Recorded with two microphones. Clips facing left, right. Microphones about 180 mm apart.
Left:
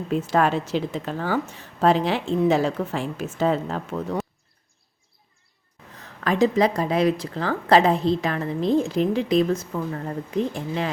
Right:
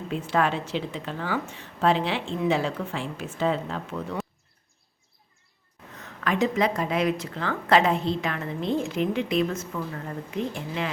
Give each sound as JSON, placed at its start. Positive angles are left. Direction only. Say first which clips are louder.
{"t": 0.1, "sound": "speech", "louder": "left 4 dB", "side_deg": 40}
{"t": 6.0, "sound": "speech", "louder": "left 4 dB", "side_deg": 35}